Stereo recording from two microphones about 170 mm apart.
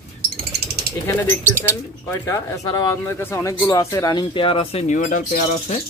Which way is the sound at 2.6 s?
20° left (ahead or behind).